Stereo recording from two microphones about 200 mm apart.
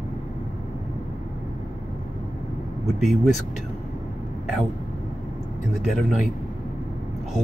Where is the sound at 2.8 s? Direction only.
Centre (ahead or behind).